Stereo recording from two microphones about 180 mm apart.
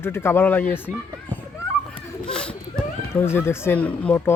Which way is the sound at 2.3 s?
5° left (ahead or behind).